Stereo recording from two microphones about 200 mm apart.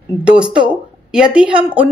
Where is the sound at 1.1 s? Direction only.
5° right (ahead or behind).